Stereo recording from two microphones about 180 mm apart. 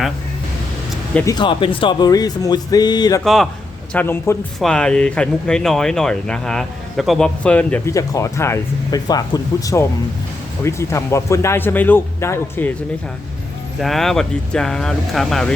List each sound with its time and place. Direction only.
1.1 s speech: 15° left (ahead or behind)
3.2 s speech: centre (ahead or behind)
3.9 s speech: 10° left (ahead or behind)
13.7 s speech: centre (ahead or behind)